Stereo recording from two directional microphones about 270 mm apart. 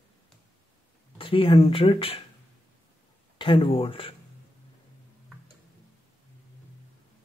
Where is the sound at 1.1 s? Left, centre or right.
Centre.